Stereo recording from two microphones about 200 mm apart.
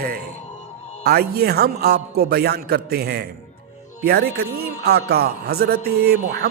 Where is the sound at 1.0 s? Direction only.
50° right (ahead or behind).